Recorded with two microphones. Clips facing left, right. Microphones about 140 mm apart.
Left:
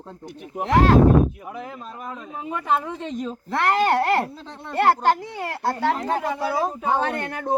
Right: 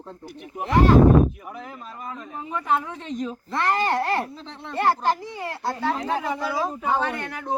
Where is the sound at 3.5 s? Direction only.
65° left (ahead or behind).